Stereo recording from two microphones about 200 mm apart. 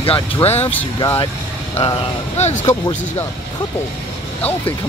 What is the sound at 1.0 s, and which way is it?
Speech, 20° left (ahead or behind).